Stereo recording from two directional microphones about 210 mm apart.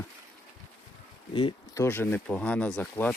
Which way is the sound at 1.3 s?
25° left (ahead or behind).